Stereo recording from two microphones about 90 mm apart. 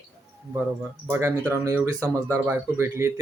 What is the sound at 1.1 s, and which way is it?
Speech, 30° right (ahead or behind).